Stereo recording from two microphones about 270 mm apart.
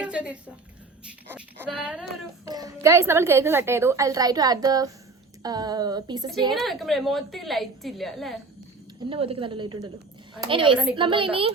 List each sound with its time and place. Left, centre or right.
0.0 s a sound: centre
1.0 s a child's voice: centre
6.5 s a woman's voice: centre
9.0 s a woman's voice: centre